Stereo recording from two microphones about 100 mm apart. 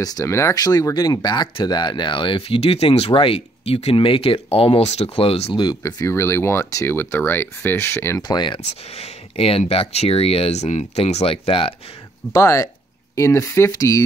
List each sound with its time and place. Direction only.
0.0 s speech: 35° left (ahead or behind); by 3.1 s 90° left
3.1 s speech: 65° left (ahead or behind); by 5.5 s 80° left
5.5 s speech: 50° left (ahead or behind)
5.8 s speech: 40° left (ahead or behind)
6.0 s speech: 25° left (ahead or behind)
8.2 s speech: 45° left (ahead or behind)
8.9 s speech: 85° left
12.3 s speech: 30° left (ahead or behind)